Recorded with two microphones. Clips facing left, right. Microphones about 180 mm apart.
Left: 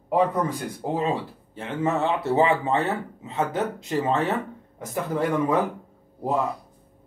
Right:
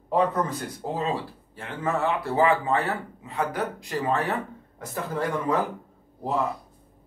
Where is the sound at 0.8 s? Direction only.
15° left (ahead or behind).